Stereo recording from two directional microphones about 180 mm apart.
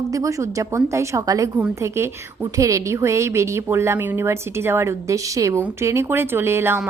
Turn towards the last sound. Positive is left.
turn(degrees=-15)  # may be behind; listen again after turning